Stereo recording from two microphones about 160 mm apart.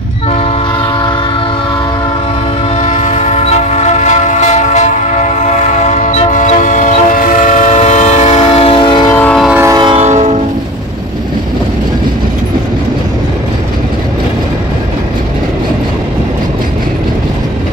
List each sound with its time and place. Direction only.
2.8 s train: 50° left (ahead or behind); by 9.1 s 30° left (ahead or behind)
9.1 s train: 10° left (ahead or behind)
9.4 s train: 5° right (ahead or behind)
9.7 s train horn: 25° right (ahead or behind)
9.9 s train: 45° right (ahead or behind)